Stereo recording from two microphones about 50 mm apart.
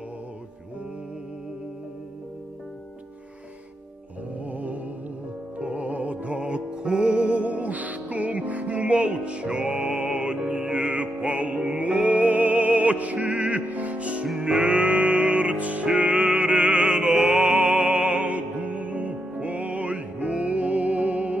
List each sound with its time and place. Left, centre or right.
4.5 s music: right